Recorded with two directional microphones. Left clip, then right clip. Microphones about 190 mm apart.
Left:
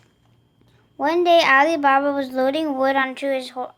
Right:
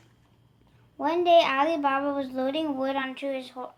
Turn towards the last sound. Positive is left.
turn(degrees=45)  # may be behind; listen again after turning